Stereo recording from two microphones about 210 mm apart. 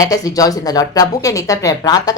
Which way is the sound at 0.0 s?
15° left (ahead or behind).